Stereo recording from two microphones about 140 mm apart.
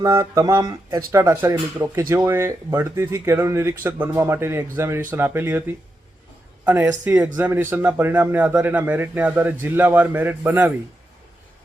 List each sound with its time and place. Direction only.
0.0 s speech: 25° right (ahead or behind)